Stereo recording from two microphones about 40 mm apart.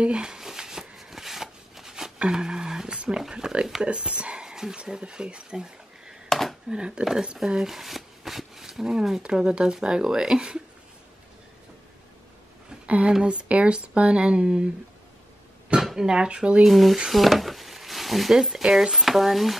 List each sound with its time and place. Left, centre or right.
0.0 s shuffling cards: right
2.1 s a sound: centre
2.9 s speech: right
6.2 s a sound: centre
6.7 s speech: right
7.4 s shuffling cards: centre
9.2 s speech: right
12.8 s a sound: right
13.2 s speech: right
15.8 s speech: centre; by 16.6 s right
16.6 s speech: centre
17.1 s a sound: centre
18.8 s speech: centre